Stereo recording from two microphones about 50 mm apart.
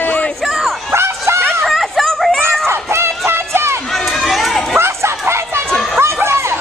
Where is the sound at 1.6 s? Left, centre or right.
Centre.